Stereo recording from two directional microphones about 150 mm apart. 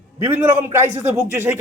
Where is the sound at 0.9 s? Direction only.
45° right (ahead or behind).